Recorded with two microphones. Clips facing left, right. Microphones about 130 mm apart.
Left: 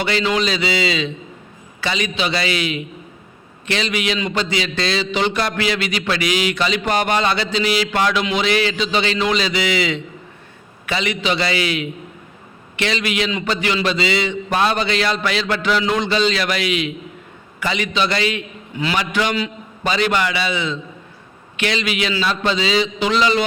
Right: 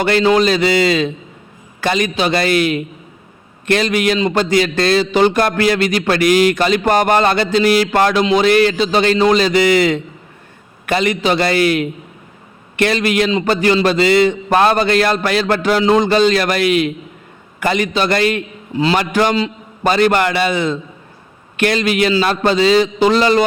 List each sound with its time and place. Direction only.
0.0 s a man's voice: 45° right (ahead or behind)
18.7 s a man's voice: 30° right (ahead or behind)
18.9 s a man's voice: 45° right (ahead or behind)